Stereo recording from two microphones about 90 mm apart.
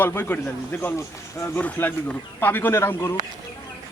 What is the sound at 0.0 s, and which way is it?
Speech, 25° left (ahead or behind).